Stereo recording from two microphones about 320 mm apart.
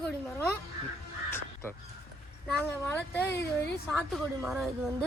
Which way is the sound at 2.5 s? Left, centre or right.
Centre.